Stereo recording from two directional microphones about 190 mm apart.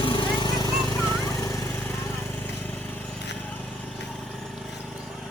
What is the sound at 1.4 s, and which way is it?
Lawn mower, 15° left (ahead or behind).